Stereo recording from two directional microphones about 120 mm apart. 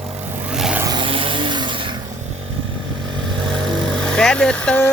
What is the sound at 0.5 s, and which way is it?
Vehicle, 5° right (ahead or behind).